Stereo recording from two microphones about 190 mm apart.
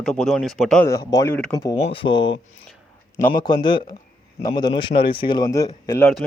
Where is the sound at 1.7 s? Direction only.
30° left (ahead or behind).